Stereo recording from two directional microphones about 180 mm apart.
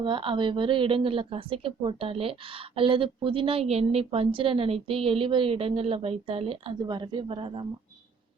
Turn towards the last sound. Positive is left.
turn(degrees=-30)  # may be behind; listen again after turning